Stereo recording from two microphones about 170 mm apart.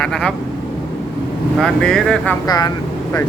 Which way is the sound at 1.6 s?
5° left (ahead or behind).